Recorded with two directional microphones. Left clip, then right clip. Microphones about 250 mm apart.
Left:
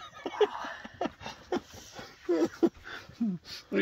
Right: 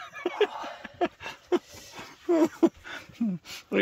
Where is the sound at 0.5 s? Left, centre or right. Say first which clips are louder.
Right 1 dB; right.